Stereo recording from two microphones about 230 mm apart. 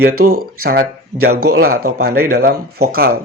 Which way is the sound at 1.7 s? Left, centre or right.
Right.